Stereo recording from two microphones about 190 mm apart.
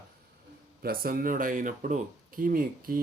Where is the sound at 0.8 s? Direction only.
50° right (ahead or behind).